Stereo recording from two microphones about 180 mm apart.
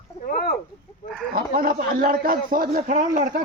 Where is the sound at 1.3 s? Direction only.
55° right (ahead or behind).